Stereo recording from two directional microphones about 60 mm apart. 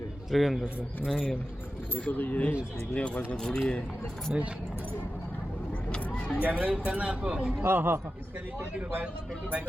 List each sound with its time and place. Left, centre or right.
0.3 s a man's voice: centre
2.0 s speech: left
3.3 s a man's voice: centre
4.3 s speech: centre
6.1 s vehicle: left
6.4 s speech: right
7.6 s speech: right